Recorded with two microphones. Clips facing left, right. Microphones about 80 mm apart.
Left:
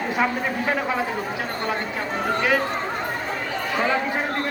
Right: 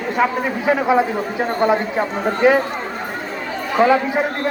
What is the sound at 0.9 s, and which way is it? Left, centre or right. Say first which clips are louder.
Speech: right 8 dB; right.